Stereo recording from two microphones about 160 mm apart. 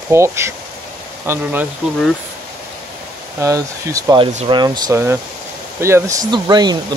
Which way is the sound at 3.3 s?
20° right (ahead or behind).